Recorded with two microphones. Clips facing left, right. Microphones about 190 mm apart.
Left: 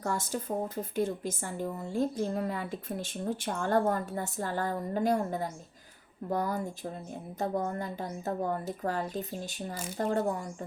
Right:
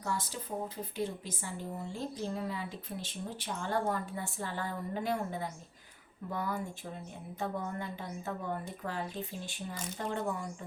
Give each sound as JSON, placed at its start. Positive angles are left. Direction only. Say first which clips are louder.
{"t": 0.0, "sound": "a woman's voice", "louder": "left 5 dB", "side_deg": 50}